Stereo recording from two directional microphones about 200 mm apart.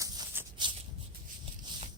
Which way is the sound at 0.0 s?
20° right (ahead or behind).